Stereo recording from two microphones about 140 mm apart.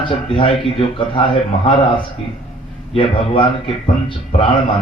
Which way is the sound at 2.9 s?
40° left (ahead or behind).